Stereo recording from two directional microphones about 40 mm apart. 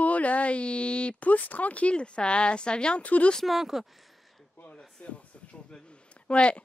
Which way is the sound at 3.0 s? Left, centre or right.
Left.